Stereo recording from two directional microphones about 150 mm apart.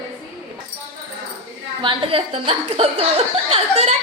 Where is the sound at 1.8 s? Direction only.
35° right (ahead or behind).